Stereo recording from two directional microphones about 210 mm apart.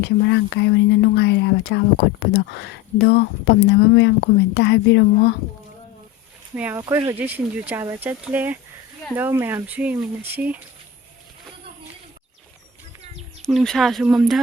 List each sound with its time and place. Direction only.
0.0 s speech: 55° left (ahead or behind)
6.6 s speech: 10° right (ahead or behind)
13.4 s speech: centre (ahead or behind)